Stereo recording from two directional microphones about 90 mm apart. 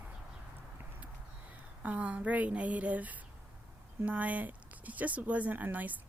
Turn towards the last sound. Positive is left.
turn(degrees=-20)  # may be behind; listen again after turning